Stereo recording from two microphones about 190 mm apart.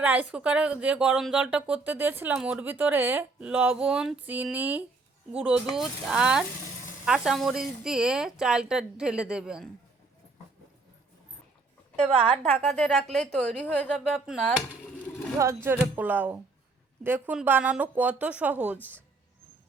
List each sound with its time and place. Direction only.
0.0 s speech: 10° right (ahead or behind)
12.0 s a woman's voice: 35° right (ahead or behind)
12.5 s speech: 5° left (ahead or behind)
15.4 s speech: 15° right (ahead or behind)